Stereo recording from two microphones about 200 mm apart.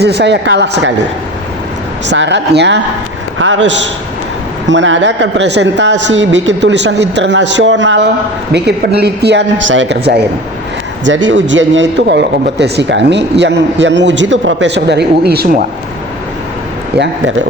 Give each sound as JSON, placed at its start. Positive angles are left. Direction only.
{"t": 0.0, "sound": "a man's voice", "side_deg": -55}
{"t": 2.0, "sound": "a man's voice", "side_deg": -65}
{"t": 11.0, "sound": "a man's voice", "side_deg": -70}